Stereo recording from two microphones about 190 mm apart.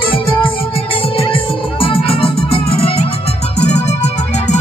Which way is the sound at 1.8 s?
30° left (ahead or behind).